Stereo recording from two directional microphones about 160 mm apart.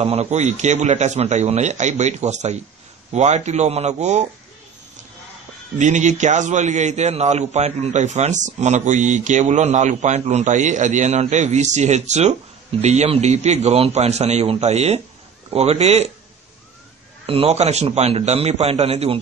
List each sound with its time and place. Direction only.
0.0 s a man's voice: 40° right (ahead or behind)
5.8 s a man's voice: 50° right (ahead or behind)
17.3 s a man's voice: 40° right (ahead or behind)